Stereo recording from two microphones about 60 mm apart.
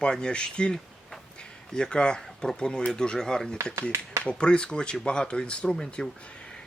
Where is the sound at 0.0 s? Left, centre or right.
Centre.